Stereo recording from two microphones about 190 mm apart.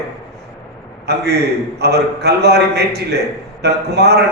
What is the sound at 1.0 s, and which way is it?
A man's voice, 60° right (ahead or behind).